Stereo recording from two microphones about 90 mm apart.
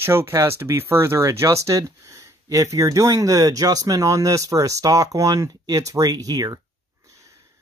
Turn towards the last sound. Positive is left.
turn(degrees=-45)  # may be behind; listen again after turning